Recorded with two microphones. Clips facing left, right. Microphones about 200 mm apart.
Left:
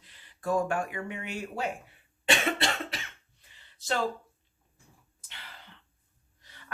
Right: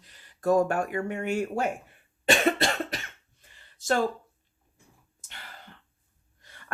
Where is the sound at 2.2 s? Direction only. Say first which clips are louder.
Right 5 dB; 40° right (ahead or behind).